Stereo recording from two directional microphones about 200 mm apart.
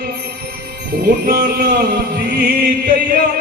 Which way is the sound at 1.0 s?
50° right (ahead or behind).